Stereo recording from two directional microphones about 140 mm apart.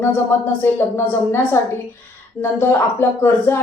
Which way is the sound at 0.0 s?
15° left (ahead or behind).